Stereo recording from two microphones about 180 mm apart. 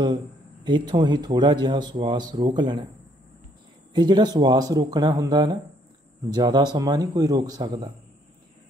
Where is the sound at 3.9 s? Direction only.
25° right (ahead or behind).